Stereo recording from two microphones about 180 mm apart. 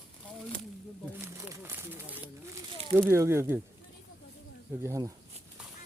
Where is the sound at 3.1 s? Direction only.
15° right (ahead or behind).